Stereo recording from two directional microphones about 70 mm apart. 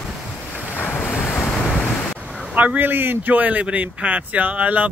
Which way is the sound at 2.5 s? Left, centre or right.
Right.